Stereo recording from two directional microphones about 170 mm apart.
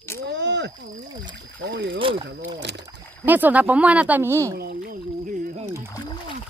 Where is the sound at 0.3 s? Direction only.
90° right.